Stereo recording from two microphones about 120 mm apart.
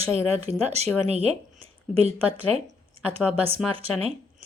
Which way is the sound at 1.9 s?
55° right (ahead or behind).